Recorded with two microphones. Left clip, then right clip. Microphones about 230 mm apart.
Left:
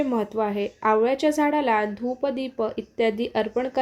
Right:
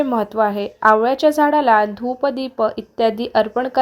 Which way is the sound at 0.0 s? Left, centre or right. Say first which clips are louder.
Right 7 dB; centre.